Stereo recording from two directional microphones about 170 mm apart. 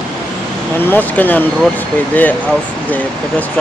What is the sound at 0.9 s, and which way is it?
Speech, 10° left (ahead or behind).